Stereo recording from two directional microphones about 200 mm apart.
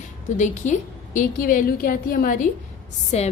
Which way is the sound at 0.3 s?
40° left (ahead or behind).